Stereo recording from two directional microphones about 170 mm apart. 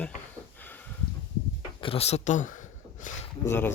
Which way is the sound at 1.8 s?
35° left (ahead or behind).